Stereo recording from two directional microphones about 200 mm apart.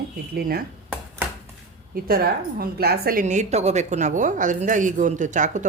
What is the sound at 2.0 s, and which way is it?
A woman's voice, 50° right (ahead or behind).